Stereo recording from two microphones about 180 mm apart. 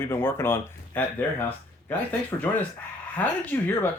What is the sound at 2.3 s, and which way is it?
Speech, 20° left (ahead or behind).